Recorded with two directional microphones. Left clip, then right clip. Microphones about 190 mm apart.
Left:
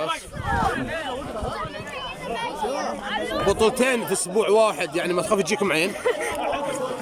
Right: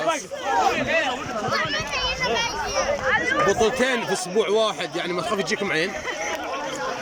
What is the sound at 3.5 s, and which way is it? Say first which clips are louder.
Speech: even; 10° left (ahead or behind).